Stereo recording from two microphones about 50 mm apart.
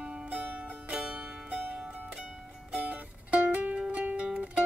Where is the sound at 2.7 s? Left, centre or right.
Right.